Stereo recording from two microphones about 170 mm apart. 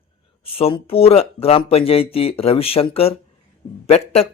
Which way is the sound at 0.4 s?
35° left (ahead or behind).